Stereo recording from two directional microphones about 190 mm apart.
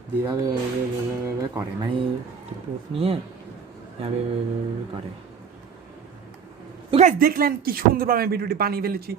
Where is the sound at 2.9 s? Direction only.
30° right (ahead or behind).